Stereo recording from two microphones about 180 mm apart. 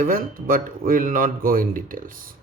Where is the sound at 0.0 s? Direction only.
50° right (ahead or behind).